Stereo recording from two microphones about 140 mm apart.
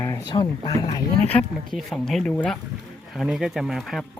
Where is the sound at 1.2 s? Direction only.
10° left (ahead or behind).